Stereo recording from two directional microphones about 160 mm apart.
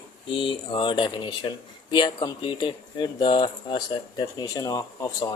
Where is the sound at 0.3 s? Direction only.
30° left (ahead or behind).